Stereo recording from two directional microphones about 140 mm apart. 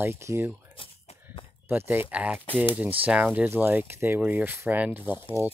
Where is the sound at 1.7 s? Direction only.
15° right (ahead or behind).